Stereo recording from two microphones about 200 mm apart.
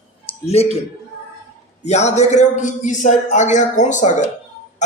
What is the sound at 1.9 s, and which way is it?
A man's voice, 35° left (ahead or behind).